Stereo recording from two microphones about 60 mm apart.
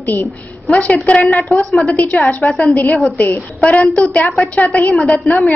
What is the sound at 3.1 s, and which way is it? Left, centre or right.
A woman's voice, left.